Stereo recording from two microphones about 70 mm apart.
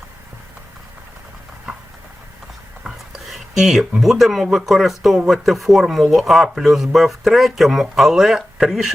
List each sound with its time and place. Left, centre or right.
2.8 s speech: centre